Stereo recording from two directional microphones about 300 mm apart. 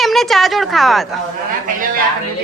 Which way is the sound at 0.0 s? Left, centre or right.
Centre.